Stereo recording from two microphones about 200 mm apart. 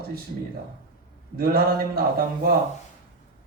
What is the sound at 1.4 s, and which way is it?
Mantra, 50° right (ahead or behind).